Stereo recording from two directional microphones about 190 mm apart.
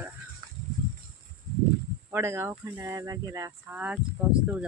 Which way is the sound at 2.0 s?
15° right (ahead or behind).